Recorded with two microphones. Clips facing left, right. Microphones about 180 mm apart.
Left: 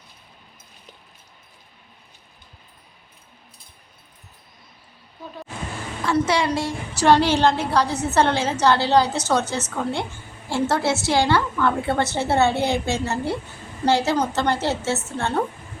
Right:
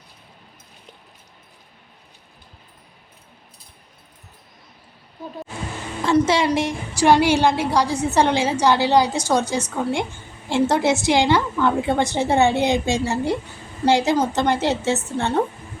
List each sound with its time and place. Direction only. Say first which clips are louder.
6.1 s a woman's voice: right 3 dB; 25° right (ahead or behind)